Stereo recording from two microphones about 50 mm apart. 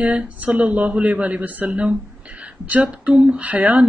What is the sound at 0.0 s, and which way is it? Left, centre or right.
Speech, right.